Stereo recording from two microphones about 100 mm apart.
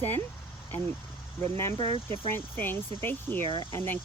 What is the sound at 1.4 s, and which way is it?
Speech, 25° left (ahead or behind).